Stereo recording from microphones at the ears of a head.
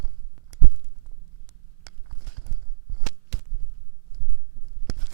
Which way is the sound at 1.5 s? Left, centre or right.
Right.